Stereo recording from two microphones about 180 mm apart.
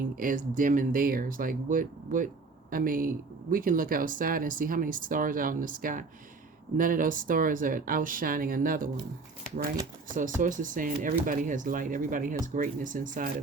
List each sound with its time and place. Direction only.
0.0 s speech: 50° right (ahead or behind)
10.2 s speech: 45° right (ahead or behind)